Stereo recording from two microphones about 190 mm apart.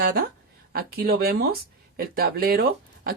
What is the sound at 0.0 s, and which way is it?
Speech, 55° right (ahead or behind).